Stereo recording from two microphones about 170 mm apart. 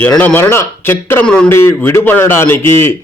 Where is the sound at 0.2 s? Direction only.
10° left (ahead or behind).